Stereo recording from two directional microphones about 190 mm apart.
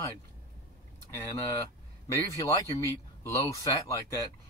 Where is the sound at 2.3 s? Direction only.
15° left (ahead or behind).